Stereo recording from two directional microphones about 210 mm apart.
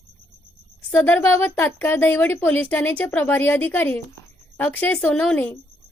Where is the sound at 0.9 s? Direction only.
10° left (ahead or behind).